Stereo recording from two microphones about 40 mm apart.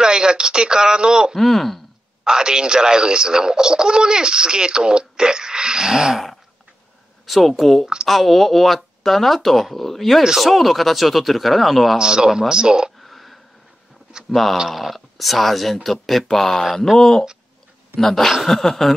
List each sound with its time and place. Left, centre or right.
0.0 s speech: centre
1.3 s speech: centre
2.2 s speech: centre
7.2 s speech: centre
12.0 s a man's voice: centre
13.0 s a sound: centre
14.3 s speech: centre